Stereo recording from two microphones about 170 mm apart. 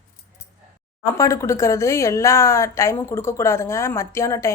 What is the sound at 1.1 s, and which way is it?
A woman's voice, 15° left (ahead or behind).